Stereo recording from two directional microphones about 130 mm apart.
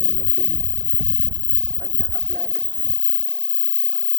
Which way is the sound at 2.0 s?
25° left (ahead or behind).